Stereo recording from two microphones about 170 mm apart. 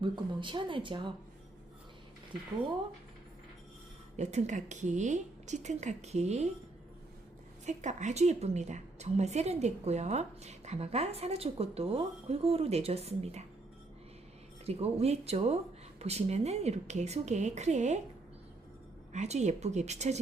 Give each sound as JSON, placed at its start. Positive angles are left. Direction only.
{"t": 0.0, "sound": "speech", "side_deg": -30}
{"t": 4.2, "sound": "a woman's voice", "side_deg": -45}
{"t": 7.6, "sound": "a woman's voice", "side_deg": -45}
{"t": 14.7, "sound": "a woman's voice", "side_deg": -35}
{"t": 19.1, "sound": "a woman's voice", "side_deg": -40}